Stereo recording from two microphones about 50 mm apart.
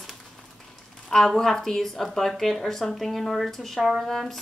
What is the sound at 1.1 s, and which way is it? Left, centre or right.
Speech, centre.